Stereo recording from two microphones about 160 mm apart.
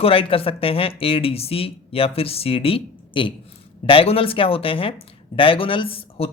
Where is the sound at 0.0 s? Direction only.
35° left (ahead or behind).